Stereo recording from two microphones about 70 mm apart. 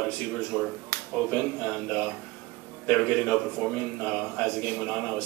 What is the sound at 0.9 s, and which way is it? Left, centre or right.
Finger snapping, left.